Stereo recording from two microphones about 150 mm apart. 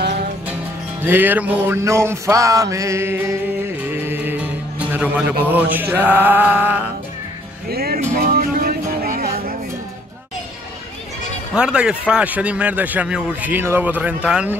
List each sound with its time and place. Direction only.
1.0 s music: 10° right (ahead or behind)
3.9 s speech: 15° right (ahead or behind)
7.7 s speech: 90° right
8.2 s music: 85° right
11.5 s speech: 5° right (ahead or behind)